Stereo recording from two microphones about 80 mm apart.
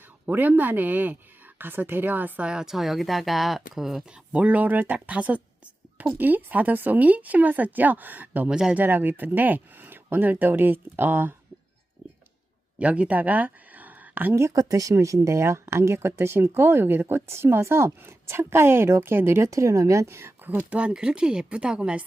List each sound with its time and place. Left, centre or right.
0.3 s speech: right
8.4 s speech: centre
8.7 s speech: right
12.8 s speech: centre
14.5 s speech: right; by 22.0 s centre